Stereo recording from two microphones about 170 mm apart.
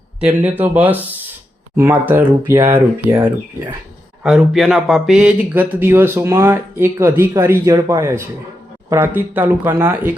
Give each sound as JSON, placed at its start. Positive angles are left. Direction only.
{"t": 0.2, "sound": "speech", "side_deg": -5}
{"t": 4.2, "sound": "speech", "side_deg": 0}